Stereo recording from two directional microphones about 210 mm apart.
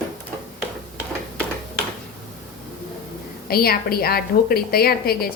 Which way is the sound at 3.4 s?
45° left (ahead or behind).